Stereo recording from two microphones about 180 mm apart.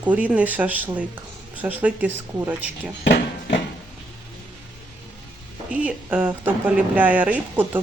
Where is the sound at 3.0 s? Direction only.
70° left (ahead or behind).